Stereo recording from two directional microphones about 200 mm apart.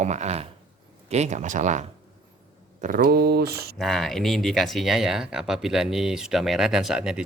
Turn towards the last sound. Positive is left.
turn(degrees=-5)  # may be behind; listen again after turning